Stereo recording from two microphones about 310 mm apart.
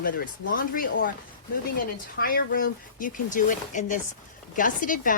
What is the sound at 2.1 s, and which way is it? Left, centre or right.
Speech, left.